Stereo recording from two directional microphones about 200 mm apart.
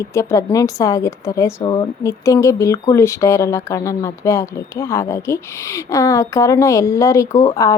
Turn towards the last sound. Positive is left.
turn(degrees=15)  # may be behind; listen again after turning